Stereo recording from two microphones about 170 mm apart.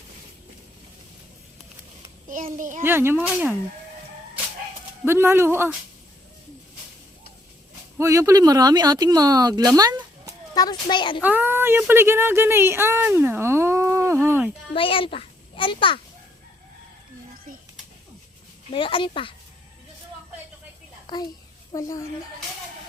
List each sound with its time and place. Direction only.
2.3 s a child's voice: 50° right (ahead or behind)
2.8 s speech: 15° right (ahead or behind)
5.0 s speech: 15° right (ahead or behind)
7.9 s speech: 15° right (ahead or behind)
10.5 s a child's voice: 25° left (ahead or behind)
11.2 s speech: 10° right (ahead or behind)
14.8 s a child's voice: 30° left (ahead or behind)
18.7 s speech: 30° left (ahead or behind)
21.1 s a child's voice: 25° left (ahead or behind)